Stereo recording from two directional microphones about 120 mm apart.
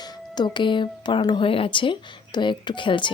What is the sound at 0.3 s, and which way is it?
A man's voice, 40° left (ahead or behind).